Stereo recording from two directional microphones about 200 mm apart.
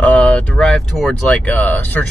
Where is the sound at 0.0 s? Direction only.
5° left (ahead or behind).